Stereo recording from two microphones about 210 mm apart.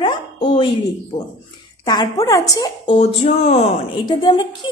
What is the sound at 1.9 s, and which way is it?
A woman's voice, 20° left (ahead or behind).